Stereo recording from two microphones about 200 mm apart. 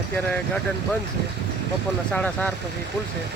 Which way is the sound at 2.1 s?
5° left (ahead or behind).